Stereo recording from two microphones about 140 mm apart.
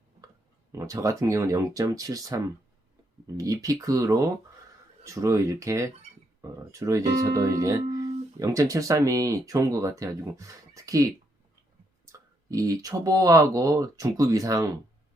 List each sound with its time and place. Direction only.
0.7 s speech: 20° right (ahead or behind)